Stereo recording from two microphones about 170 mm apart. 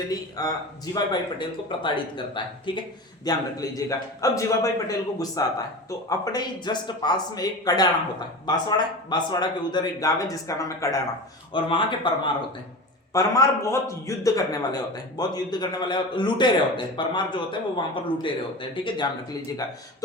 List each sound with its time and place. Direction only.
0.1 s a man's voice: 20° left (ahead or behind)
11.5 s a man's voice: 30° left (ahead or behind)
13.1 s a man's voice: 20° left (ahead or behind)